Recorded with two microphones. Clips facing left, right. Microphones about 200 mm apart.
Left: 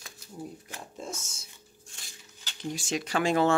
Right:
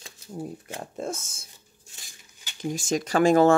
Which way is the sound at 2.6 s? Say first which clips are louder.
Right 5 dB; 45° right (ahead or behind).